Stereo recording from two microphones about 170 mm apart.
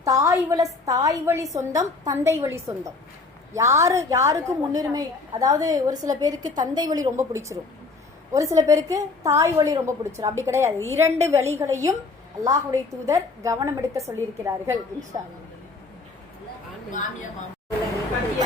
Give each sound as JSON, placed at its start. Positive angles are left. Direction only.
{"t": 0.0, "sound": "a woman's voice", "side_deg": -20}